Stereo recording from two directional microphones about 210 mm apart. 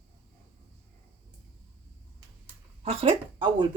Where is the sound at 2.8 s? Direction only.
30° right (ahead or behind).